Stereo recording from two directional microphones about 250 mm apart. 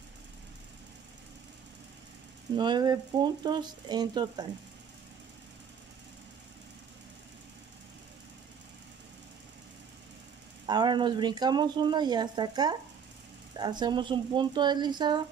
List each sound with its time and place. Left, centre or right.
2.5 s speech: centre
10.7 s speech: centre